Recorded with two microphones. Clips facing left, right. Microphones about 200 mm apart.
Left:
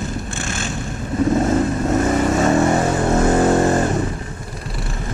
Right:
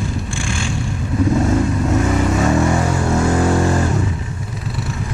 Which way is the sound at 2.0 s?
40° left (ahead or behind).